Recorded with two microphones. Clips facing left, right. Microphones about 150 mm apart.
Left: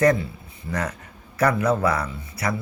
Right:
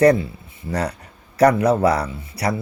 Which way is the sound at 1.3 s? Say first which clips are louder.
Right 6 dB; 35° right (ahead or behind).